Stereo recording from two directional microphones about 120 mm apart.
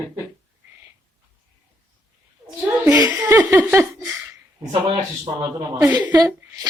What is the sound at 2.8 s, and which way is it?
Laughter, 30° right (ahead or behind).